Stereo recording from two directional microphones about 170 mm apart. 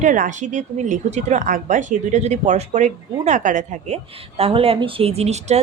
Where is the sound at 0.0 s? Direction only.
50° right (ahead or behind).